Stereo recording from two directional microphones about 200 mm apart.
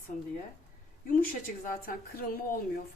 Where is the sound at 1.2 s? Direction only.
45° left (ahead or behind).